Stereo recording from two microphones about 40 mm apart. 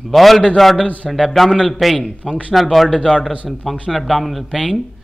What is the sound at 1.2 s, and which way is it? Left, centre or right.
A man's voice, centre.